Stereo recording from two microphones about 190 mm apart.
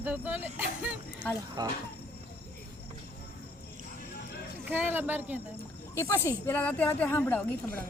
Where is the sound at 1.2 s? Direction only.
5° left (ahead or behind).